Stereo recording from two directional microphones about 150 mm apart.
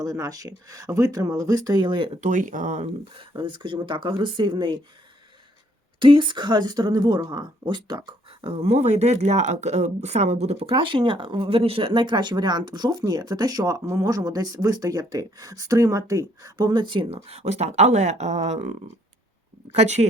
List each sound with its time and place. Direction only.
0.0 s speech: 25° right (ahead or behind)
2.2 s speech: 60° right (ahead or behind)
2.8 s speech: 35° right (ahead or behind)
6.0 s speech: 35° right (ahead or behind)